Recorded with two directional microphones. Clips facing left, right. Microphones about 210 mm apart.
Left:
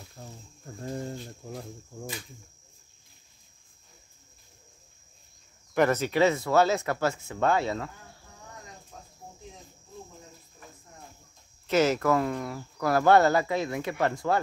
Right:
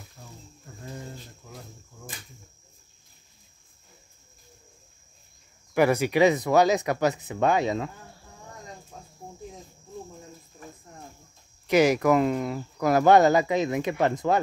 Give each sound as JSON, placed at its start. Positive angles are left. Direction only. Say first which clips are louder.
{"t": 0.8, "sound": "speech", "louder": "left 5 dB", "side_deg": 40}
{"t": 5.8, "sound": "speech", "louder": "right 3 dB", "side_deg": -10}
{"t": 11.6, "sound": "speech", "louder": "right 3 dB", "side_deg": -15}